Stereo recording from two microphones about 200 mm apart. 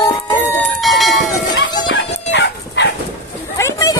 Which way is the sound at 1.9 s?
60° left (ahead or behind).